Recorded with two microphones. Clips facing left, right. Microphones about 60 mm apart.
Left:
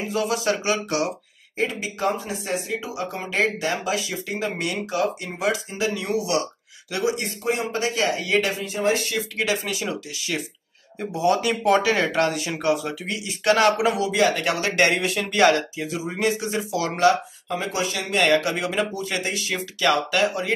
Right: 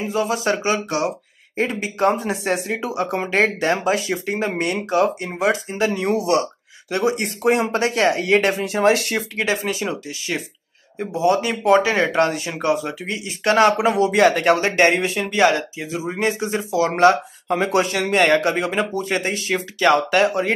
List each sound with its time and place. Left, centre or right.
0.0 s speech: right
0.4 s speech: right
1.6 s speech: right
7.2 s speech: right
8.6 s speech: right
9.4 s speech: right
13.9 s speech: right
15.2 s speech: centre
16.2 s speech: right
17.0 s speech: right